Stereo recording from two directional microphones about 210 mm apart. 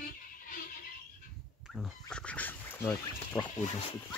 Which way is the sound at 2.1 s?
5° left (ahead or behind).